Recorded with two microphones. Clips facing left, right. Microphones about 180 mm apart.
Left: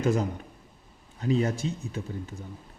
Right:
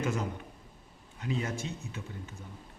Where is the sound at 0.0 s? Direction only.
35° left (ahead or behind).